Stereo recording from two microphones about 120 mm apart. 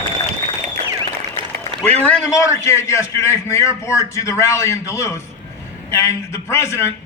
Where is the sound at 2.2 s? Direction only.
25° left (ahead or behind).